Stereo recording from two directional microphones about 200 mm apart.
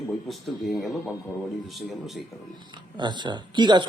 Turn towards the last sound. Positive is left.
turn(degrees=-20)  # may be behind; listen again after turning